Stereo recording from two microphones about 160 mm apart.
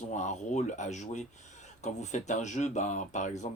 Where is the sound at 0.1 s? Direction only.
50° left (ahead or behind).